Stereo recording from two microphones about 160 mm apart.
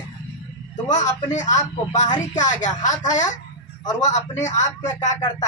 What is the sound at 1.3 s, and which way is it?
Speech, 50° left (ahead or behind).